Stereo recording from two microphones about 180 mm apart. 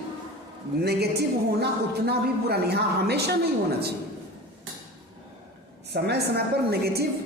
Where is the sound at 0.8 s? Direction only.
65° right (ahead or behind).